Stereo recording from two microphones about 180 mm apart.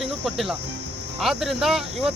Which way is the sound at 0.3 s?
Centre (ahead or behind).